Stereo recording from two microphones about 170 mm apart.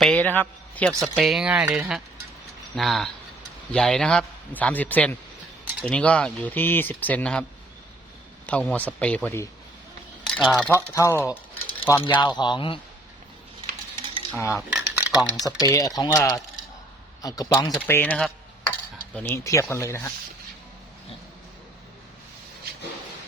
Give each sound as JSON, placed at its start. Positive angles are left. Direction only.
{"t": 0.0, "sound": "a man's voice", "side_deg": 5}
{"t": 1.0, "sound": "speech", "side_deg": 0}
{"t": 3.7, "sound": "cutlery", "side_deg": 5}
{"t": 8.4, "sound": "cutlery", "side_deg": 10}
{"t": 10.2, "sound": "speech", "side_deg": 0}
{"t": 10.9, "sound": "speech", "side_deg": 15}
{"t": 12.2, "sound": "speech", "side_deg": 25}
{"t": 14.3, "sound": "cutlery", "side_deg": 15}
{"t": 14.7, "sound": "a sound", "side_deg": -10}
{"t": 15.4, "sound": "speech", "side_deg": 20}
{"t": 17.7, "sound": "cutlery", "side_deg": 10}